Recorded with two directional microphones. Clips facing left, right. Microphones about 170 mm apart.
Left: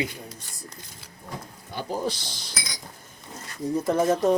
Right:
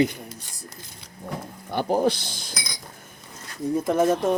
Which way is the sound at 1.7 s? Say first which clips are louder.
Right 7 dB; 65° right (ahead or behind).